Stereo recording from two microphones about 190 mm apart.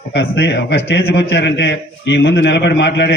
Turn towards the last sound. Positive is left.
turn(degrees=65)  # may be behind; listen again after turning